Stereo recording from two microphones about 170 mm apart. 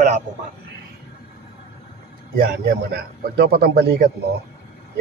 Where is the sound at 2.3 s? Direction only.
60° right (ahead or behind).